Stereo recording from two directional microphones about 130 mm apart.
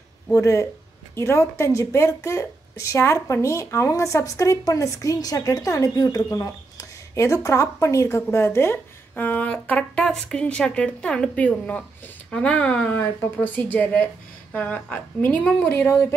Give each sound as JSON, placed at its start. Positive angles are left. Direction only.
{"t": 0.3, "sound": "a woman's voice", "side_deg": 25}